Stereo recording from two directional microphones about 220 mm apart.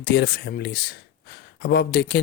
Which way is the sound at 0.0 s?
50° left (ahead or behind).